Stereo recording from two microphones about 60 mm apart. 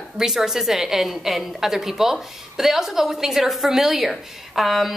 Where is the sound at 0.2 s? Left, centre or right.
Centre.